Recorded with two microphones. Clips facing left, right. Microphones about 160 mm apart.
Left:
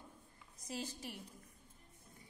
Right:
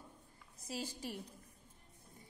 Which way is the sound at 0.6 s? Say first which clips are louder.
Right 1 dB; 35° right (ahead or behind).